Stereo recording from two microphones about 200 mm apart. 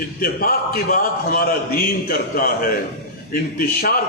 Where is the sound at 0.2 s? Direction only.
50° left (ahead or behind).